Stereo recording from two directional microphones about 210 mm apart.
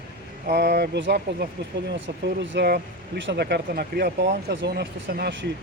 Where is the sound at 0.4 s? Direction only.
50° right (ahead or behind).